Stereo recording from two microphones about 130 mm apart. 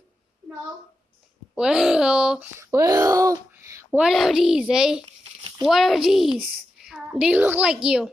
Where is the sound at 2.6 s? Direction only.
25° right (ahead or behind).